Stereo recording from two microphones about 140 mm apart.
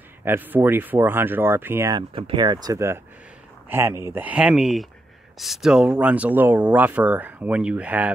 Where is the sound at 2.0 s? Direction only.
35° right (ahead or behind).